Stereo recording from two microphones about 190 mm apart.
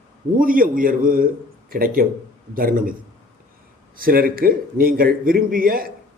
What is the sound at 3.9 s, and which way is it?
A man's voice, 50° right (ahead or behind).